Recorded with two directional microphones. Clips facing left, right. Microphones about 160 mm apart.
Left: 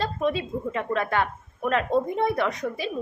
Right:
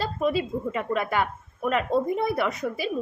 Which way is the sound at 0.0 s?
5° right (ahead or behind).